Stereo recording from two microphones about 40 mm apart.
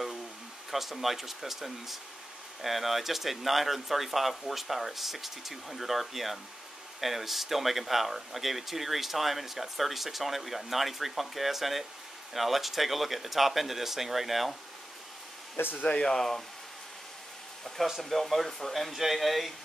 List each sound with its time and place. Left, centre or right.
0.7 s speech: centre
15.5 s speech: left
15.9 s speech: left
16.2 s speech: centre
17.7 s speech: centre
18.0 s speech: centre